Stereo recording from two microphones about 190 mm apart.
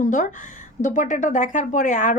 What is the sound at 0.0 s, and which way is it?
Speech, 45° left (ahead or behind).